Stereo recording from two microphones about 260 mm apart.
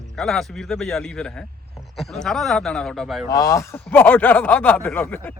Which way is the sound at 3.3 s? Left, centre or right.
Centre.